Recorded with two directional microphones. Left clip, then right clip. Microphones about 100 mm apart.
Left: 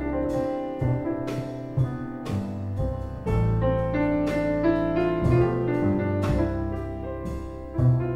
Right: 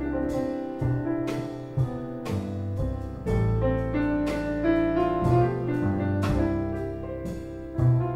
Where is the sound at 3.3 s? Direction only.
20° left (ahead or behind).